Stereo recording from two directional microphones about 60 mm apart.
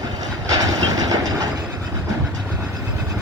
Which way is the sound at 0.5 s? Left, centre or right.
Right.